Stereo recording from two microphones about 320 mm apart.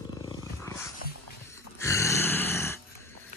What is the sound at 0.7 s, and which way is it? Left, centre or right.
Dog, centre.